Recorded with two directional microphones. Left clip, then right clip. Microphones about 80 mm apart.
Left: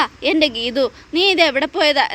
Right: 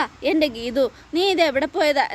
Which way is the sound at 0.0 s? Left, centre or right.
Right.